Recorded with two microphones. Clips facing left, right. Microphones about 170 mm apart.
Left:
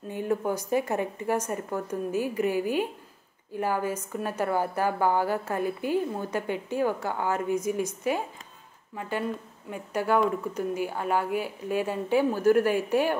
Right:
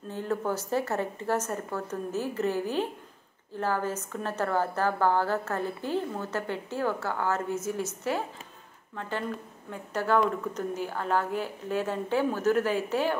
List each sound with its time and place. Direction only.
0.1 s a woman's voice: 15° left (ahead or behind)
9.7 s a woman's voice: 15° left (ahead or behind)